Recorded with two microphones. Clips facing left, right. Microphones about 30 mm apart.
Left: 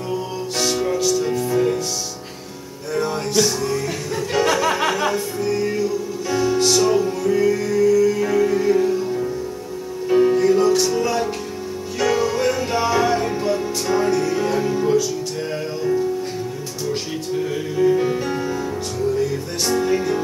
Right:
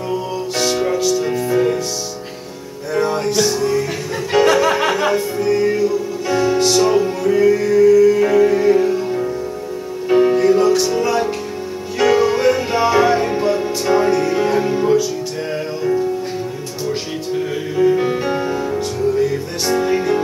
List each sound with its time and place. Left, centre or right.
0.1 s music: centre
2.9 s music: centre
16.8 s music: centre